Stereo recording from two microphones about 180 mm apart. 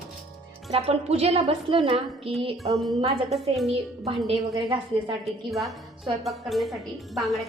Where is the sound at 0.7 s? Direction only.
35° right (ahead or behind).